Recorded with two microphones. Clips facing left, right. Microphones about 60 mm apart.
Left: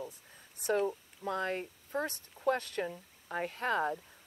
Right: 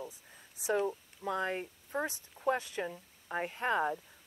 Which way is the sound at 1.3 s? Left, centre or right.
Centre.